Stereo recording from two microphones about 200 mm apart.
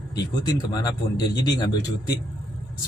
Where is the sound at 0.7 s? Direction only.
20° left (ahead or behind).